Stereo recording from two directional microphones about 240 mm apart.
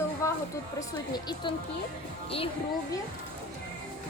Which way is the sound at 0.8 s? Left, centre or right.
Centre.